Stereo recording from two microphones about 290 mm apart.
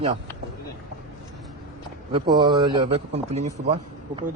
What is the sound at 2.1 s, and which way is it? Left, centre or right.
A man's voice, centre.